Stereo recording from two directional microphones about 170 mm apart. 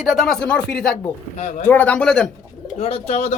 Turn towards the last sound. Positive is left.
turn(degrees=40)  # may be behind; listen again after turning